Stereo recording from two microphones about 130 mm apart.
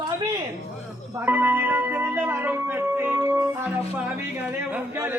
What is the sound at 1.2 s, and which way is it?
Music, 15° right (ahead or behind).